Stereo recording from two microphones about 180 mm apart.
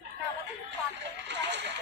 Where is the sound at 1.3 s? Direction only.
80° right.